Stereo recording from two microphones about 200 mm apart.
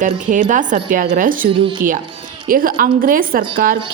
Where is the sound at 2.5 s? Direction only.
45° right (ahead or behind).